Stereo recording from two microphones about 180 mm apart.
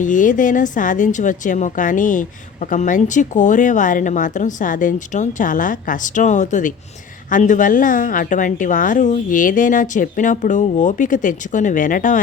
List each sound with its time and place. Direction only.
0.0 s a woman's voice: 45° left (ahead or behind)